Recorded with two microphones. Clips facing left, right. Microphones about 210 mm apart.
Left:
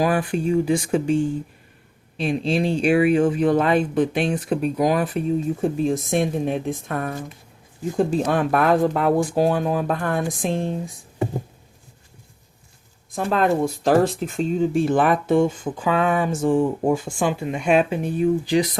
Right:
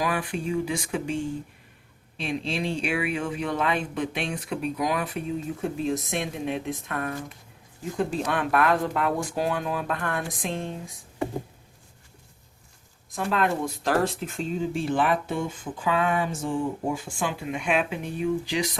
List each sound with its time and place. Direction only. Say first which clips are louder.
0.0 s speech: left 7 dB; 45° left (ahead or behind)
2.1 s speech: left 7 dB; 40° left (ahead or behind)
13.1 s speech: left 6 dB; 40° left (ahead or behind)